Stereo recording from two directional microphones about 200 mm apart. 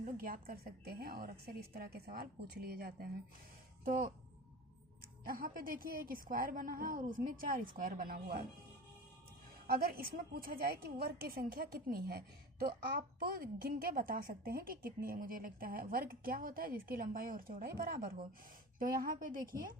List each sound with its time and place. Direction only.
0.0 s a woman's voice: 45° right (ahead or behind)
5.2 s a woman's voice: 45° right (ahead or behind)
9.6 s a woman's voice: 50° right (ahead or behind)